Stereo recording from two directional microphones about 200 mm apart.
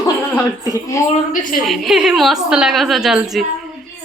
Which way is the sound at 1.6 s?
Centre (ahead or behind).